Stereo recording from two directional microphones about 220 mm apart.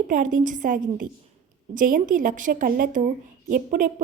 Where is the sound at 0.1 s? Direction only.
35° right (ahead or behind).